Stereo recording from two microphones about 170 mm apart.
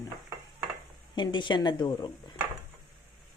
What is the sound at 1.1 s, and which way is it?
Speech, 25° left (ahead or behind).